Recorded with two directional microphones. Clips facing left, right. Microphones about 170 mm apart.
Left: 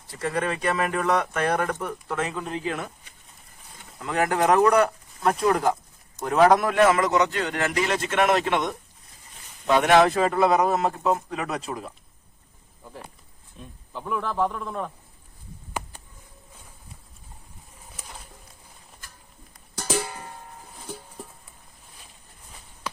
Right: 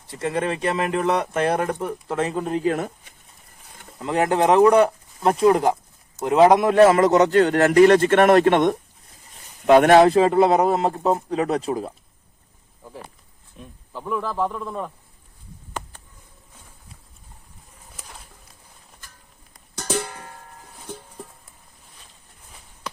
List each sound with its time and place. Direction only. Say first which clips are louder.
0.1 s a man's voice: right 3 dB; 25° right (ahead or behind); by 3.1 s 40° right (ahead or behind)
4.0 s speech: right 3 dB; 25° right (ahead or behind)
6.7 s speech: right 6 dB; 35° right (ahead or behind); by 10.0 s 50° right (ahead or behind)
10.0 s a man's voice: right 5 dB; 25° right (ahead or behind)
13.6 s speech: right 1 dB; 5° right (ahead or behind)
19.8 s music: right 1 dB; 5° left (ahead or behind)